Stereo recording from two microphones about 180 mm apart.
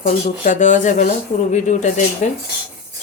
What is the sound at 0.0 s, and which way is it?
Speech, 45° left (ahead or behind).